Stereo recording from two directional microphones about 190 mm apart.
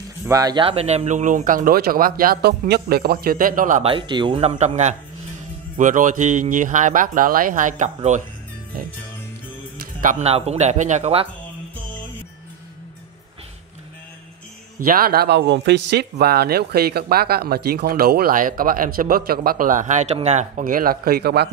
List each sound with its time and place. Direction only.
0.2 s speech: 20° right (ahead or behind); by 3.8 s 45° right (ahead or behind)
3.8 s speech: 25° right (ahead or behind)
10.0 s speech: 35° right (ahead or behind)
14.8 s speech: 50° right (ahead or behind)